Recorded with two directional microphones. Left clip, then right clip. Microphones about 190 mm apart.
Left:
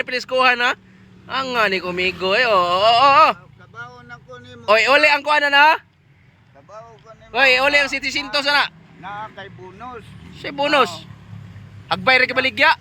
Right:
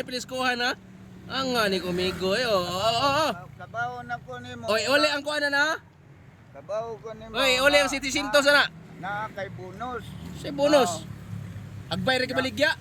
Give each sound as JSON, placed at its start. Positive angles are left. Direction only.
{"t": 0.0, "sound": "speech", "side_deg": -5}
{"t": 3.8, "sound": "speech", "side_deg": -15}
{"t": 4.6, "sound": "speech", "side_deg": 0}
{"t": 5.3, "sound": "speech", "side_deg": 30}
{"t": 6.7, "sound": "speech", "side_deg": -40}
{"t": 7.3, "sound": "speech", "side_deg": 0}